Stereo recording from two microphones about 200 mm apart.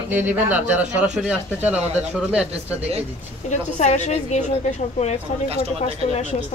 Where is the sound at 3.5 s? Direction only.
35° left (ahead or behind).